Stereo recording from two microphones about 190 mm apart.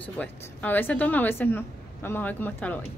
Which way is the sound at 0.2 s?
10° left (ahead or behind).